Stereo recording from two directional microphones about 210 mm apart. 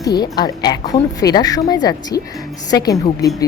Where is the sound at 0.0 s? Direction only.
20° left (ahead or behind).